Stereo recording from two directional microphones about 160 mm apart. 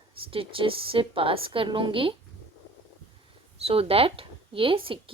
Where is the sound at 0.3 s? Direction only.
35° right (ahead or behind).